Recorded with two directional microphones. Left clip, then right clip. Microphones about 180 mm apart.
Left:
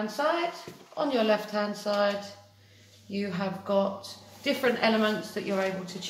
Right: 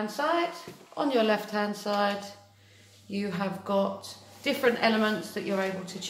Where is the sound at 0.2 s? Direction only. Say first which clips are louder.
Even; 30° right (ahead or behind).